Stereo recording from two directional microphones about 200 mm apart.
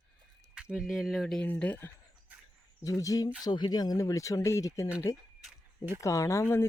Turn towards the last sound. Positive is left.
turn(degrees=15)  # may be behind; listen again after turning